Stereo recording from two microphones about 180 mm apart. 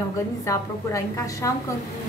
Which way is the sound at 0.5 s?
20° left (ahead or behind).